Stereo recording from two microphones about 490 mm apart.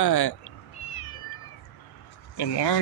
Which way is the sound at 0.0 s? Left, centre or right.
Left.